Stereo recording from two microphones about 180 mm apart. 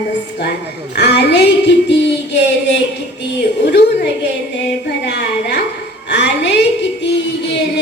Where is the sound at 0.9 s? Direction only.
70° left (ahead or behind).